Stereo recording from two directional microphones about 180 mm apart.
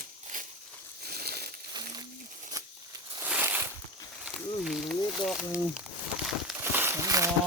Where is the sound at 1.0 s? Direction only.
60° right (ahead or behind).